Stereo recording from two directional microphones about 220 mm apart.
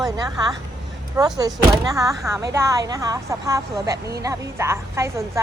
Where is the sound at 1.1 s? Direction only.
15° right (ahead or behind).